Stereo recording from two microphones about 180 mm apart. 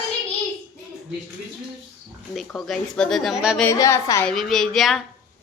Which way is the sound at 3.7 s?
20° left (ahead or behind).